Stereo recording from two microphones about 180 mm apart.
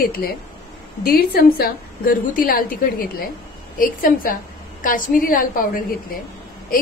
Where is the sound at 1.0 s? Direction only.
55° left (ahead or behind).